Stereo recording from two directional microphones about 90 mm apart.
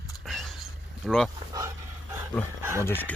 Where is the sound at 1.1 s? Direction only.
5° left (ahead or behind).